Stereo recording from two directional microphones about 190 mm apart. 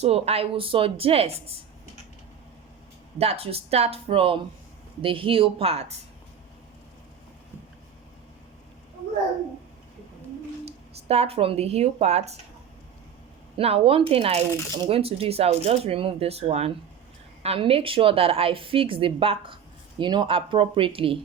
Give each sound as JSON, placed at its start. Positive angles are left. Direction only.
{"t": 0.0, "sound": "speech", "side_deg": -35}
{"t": 3.2, "sound": "a woman's voice", "side_deg": -30}
{"t": 10.7, "sound": "speech", "side_deg": -35}
{"t": 13.6, "sound": "a woman's voice", "side_deg": -30}